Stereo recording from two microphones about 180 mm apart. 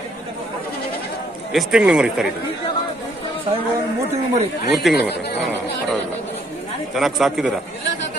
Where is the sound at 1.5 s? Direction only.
Centre (ahead or behind).